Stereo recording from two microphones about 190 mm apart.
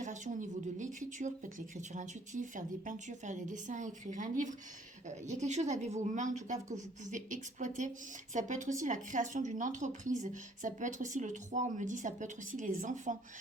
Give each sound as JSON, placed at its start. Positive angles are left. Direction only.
{"t": 0.0, "sound": "a woman's voice", "side_deg": -40}